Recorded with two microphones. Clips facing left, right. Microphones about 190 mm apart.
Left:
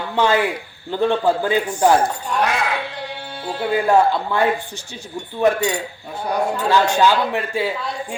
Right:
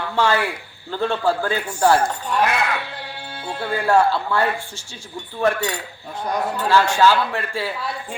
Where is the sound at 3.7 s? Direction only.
15° left (ahead or behind).